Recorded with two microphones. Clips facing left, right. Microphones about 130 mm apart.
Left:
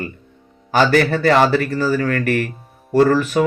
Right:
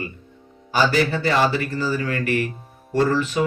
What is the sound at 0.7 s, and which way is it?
Speech, 60° left (ahead or behind).